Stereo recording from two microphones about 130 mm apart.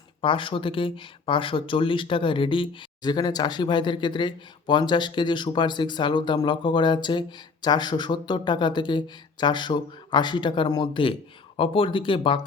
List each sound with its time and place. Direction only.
0.2 s speech: 40° left (ahead or behind)